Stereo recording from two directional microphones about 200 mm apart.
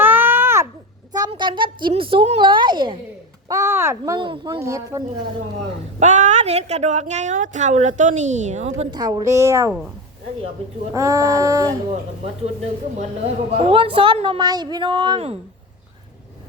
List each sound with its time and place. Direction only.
0.0 s a sound: 10° right (ahead or behind)
1.1 s a child's voice: 20° right (ahead or behind)
3.5 s speech: 15° right (ahead or behind)
6.0 s a woman's voice: 35° right (ahead or behind)
8.9 s speech: 20° right (ahead or behind)
10.9 s speech: 15° right (ahead or behind)
13.0 s a woman's voice: 30° right (ahead or behind)